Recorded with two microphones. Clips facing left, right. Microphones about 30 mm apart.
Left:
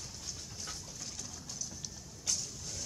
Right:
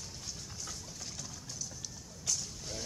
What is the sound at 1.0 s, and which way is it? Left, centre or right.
Pigeon, centre.